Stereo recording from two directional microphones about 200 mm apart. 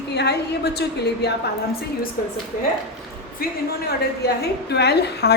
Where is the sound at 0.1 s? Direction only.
55° left (ahead or behind).